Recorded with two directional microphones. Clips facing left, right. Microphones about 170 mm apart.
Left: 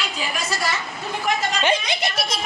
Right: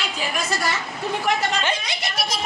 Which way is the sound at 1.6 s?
20° left (ahead or behind).